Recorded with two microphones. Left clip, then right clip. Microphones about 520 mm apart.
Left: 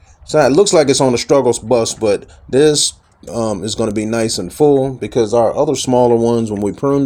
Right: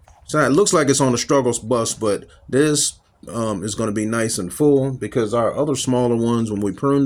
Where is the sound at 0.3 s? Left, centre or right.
Right.